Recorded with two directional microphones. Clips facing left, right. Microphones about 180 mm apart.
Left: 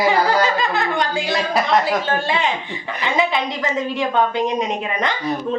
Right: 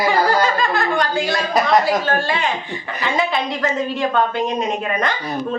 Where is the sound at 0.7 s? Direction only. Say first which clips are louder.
Right 2 dB; 20° left (ahead or behind).